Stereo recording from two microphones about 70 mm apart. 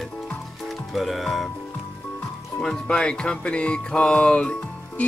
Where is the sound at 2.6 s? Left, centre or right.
Centre.